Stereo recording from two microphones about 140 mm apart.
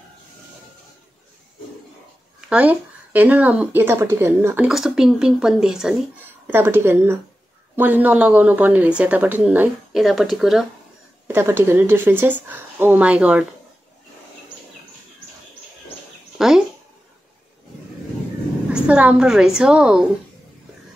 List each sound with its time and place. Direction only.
2.5 s speech: 10° right (ahead or behind)
4.6 s speech: 5° right (ahead or behind)
6.4 s speech: 15° right (ahead or behind)
11.2 s speech: 15° right (ahead or behind)
16.3 s speech: 5° right (ahead or behind)
18.7 s speech: 5° right (ahead or behind)